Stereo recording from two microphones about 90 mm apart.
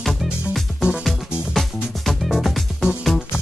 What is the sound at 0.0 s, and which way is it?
Music, centre (ahead or behind).